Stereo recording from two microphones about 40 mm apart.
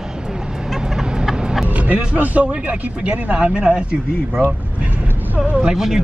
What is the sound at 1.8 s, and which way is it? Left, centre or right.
Speech, right.